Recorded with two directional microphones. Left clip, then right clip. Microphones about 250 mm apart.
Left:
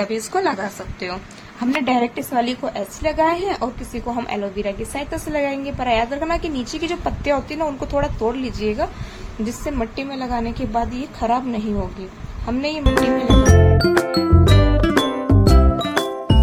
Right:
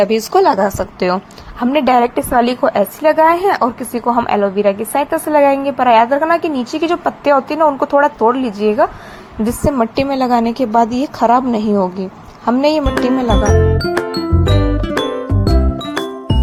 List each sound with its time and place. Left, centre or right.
0.0 s a woman's voice: right
13.3 s music: centre